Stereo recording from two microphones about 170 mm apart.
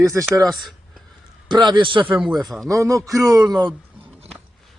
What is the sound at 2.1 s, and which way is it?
Speech, 5° right (ahead or behind).